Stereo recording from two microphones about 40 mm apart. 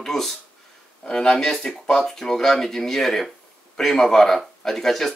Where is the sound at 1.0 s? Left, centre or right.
Centre.